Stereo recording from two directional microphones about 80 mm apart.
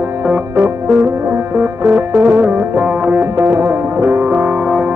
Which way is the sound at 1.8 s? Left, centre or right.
Right.